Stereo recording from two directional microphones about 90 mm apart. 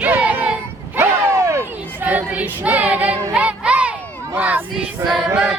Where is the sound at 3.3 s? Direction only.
10° right (ahead or behind).